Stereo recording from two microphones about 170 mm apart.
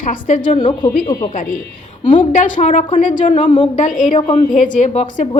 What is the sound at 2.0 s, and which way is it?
A woman's voice, 45° left (ahead or behind).